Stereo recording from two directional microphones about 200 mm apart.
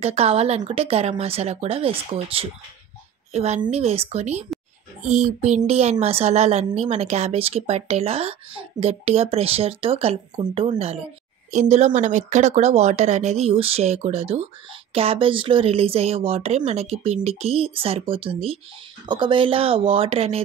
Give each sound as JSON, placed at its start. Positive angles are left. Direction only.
{"t": 0.0, "sound": "speech", "side_deg": -30}